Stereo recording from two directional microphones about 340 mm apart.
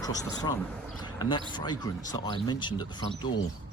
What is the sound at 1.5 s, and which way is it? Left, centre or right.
Speech, centre.